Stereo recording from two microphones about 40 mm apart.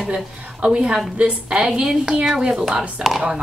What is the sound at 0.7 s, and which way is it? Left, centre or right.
Speech, centre.